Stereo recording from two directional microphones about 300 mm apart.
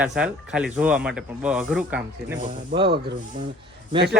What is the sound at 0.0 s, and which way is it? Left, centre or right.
Speech, centre.